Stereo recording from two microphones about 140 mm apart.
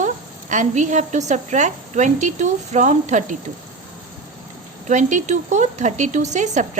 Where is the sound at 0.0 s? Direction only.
60° right (ahead or behind).